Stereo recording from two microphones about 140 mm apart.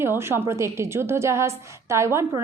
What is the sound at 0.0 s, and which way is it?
A woman's voice, 20° right (ahead or behind).